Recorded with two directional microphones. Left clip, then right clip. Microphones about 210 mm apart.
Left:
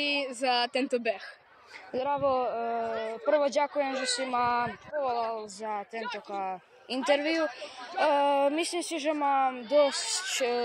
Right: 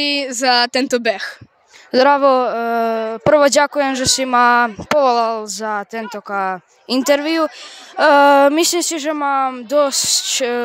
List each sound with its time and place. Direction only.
0.0 s speech: 55° right (ahead or behind); by 10.6 s 40° right (ahead or behind)